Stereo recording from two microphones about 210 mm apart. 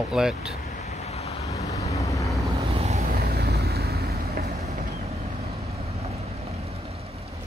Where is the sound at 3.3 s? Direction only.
45° right (ahead or behind).